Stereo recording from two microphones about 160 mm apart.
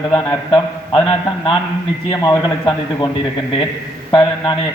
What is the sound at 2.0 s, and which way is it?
A man's voice, 25° left (ahead or behind).